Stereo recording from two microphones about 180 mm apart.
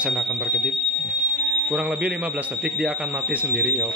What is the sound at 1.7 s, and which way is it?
Speech, 5° right (ahead or behind).